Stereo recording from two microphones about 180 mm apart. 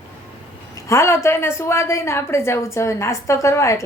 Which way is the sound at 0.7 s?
15° left (ahead or behind).